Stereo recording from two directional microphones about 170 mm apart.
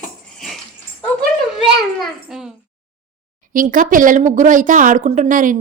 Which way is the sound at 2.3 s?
Centre (ahead or behind).